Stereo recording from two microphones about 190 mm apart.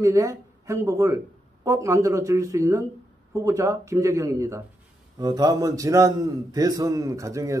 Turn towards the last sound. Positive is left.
turn(degrees=-15)  # may be behind; listen again after turning